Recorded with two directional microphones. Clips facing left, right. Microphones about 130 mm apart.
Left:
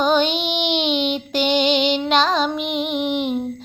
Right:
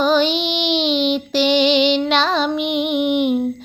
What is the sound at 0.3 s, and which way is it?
Child singing, 55° left (ahead or behind).